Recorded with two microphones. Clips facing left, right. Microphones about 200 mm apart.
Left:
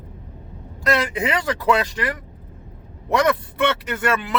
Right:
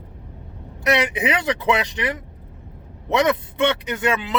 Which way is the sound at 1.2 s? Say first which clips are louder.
Left 3 dB; 20° right (ahead or behind).